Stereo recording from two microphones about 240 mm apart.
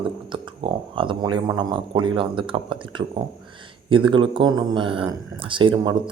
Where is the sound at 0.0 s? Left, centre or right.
Right.